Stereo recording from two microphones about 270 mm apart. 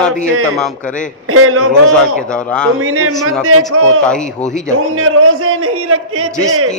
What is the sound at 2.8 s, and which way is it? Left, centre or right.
Speech, right.